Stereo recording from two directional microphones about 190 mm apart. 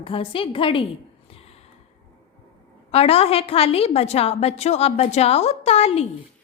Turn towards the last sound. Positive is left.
turn(degrees=35)  # may be behind; listen again after turning